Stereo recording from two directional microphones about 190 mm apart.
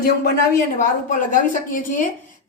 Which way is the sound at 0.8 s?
45° left (ahead or behind).